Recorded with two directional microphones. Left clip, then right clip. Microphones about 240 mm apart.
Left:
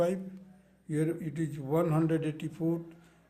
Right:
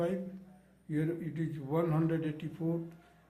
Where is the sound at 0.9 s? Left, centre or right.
Left.